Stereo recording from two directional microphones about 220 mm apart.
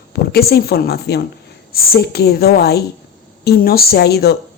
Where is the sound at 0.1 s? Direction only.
45° left (ahead or behind).